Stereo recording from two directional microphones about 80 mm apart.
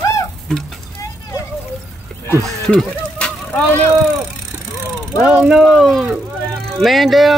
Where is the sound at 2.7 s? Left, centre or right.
Centre.